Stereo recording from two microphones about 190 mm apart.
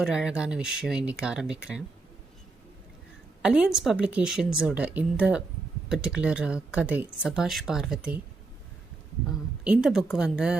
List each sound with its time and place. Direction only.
0.0 s speech: 5° right (ahead or behind)
3.4 s speech: 5° right (ahead or behind)
9.6 s speech: 5° right (ahead or behind)